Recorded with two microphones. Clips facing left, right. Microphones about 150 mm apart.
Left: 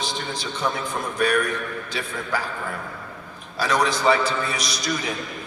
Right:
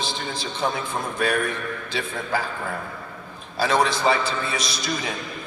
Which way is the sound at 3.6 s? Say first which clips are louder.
Right 1 dB; 30° right (ahead or behind).